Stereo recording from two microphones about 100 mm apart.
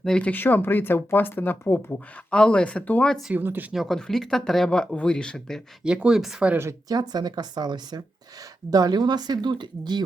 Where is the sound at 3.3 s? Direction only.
20° right (ahead or behind).